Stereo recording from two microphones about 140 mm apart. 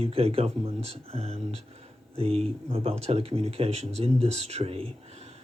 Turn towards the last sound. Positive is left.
turn(degrees=-45)  # may be behind; listen again after turning